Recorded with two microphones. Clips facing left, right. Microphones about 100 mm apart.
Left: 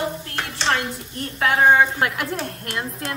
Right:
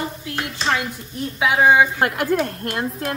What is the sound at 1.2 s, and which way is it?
Speech, 5° right (ahead or behind).